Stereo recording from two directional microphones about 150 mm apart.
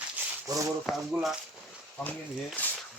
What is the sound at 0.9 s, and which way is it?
Speech, centre (ahead or behind).